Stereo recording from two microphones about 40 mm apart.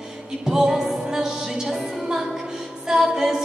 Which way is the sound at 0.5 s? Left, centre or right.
Centre.